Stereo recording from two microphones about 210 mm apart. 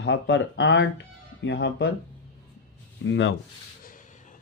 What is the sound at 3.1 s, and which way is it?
Speech, 60° left (ahead or behind).